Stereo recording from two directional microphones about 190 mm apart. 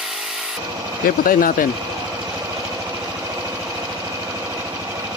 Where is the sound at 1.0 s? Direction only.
50° left (ahead or behind).